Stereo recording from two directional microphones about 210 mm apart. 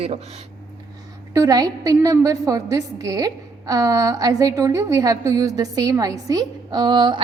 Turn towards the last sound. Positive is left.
turn(degrees=-20)  # may be behind; listen again after turning